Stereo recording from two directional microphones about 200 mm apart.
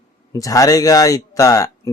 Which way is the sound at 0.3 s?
15° left (ahead or behind).